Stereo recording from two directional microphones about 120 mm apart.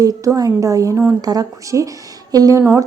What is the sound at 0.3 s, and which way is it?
A woman's voice, 30° right (ahead or behind).